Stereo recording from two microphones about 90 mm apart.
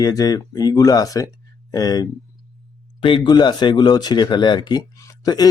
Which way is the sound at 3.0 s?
75° left (ahead or behind).